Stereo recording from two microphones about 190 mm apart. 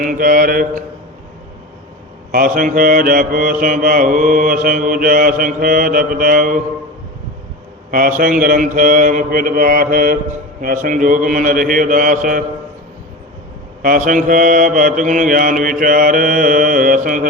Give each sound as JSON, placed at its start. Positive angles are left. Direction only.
{"t": 0.0, "sound": "mantra", "side_deg": -45}
{"t": 2.3, "sound": "mantra", "side_deg": -45}
{"t": 7.9, "sound": "mantra", "side_deg": -45}
{"t": 13.8, "sound": "mantra", "side_deg": -45}